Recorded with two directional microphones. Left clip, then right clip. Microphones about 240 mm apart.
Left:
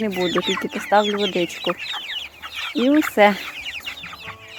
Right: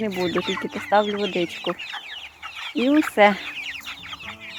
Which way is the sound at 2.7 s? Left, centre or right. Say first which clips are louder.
Left 2 dB; centre.